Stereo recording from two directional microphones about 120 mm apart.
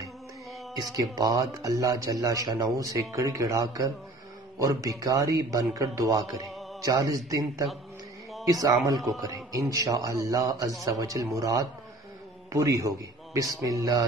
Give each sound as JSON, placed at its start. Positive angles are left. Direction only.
{"t": 0.9, "sound": "a man's voice", "side_deg": -30}